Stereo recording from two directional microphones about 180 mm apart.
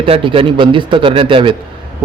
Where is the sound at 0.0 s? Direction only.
30° right (ahead or behind).